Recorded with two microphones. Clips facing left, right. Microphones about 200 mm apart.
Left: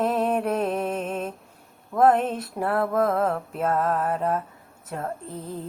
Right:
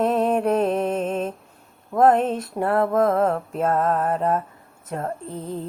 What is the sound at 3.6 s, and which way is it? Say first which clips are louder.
Music: right 3 dB; 30° right (ahead or behind).